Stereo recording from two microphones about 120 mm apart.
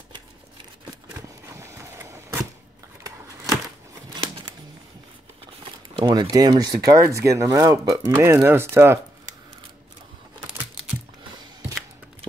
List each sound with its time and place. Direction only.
1.6 s vehicle: 25° right (ahead or behind)
3.0 s a sound: 30° right (ahead or behind)
5.9 s speech: 40° right (ahead or behind); by 9.0 s 20° right (ahead or behind)